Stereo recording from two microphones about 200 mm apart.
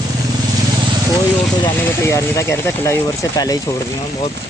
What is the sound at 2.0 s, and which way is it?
Speech, 15° left (ahead or behind).